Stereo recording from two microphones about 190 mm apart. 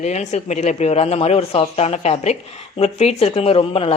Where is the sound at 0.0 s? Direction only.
35° left (ahead or behind).